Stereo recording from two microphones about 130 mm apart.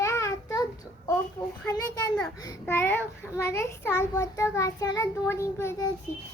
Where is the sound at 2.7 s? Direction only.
15° left (ahead or behind).